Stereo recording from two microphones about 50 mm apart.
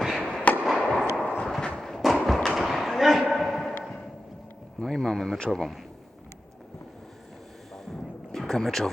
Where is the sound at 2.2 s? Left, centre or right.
Centre.